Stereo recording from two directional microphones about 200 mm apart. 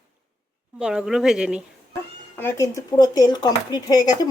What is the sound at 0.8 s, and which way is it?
Speech, 5° right (ahead or behind).